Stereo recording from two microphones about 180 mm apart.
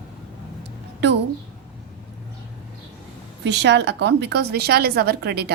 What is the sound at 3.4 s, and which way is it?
A woman's voice, 75° right (ahead or behind).